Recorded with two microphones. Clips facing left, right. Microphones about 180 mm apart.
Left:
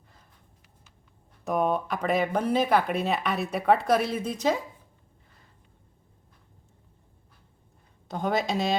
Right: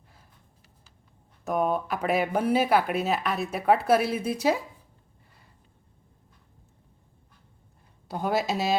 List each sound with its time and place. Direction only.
1.5 s speech: centre (ahead or behind)
8.0 s speech: 5° right (ahead or behind)